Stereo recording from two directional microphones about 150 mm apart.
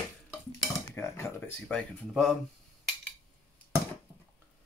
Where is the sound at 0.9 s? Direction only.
15° left (ahead or behind).